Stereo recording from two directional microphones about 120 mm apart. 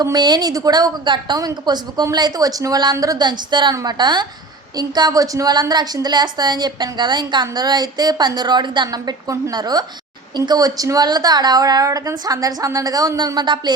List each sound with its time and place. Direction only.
0.0 s a woman's voice: 35° right (ahead or behind)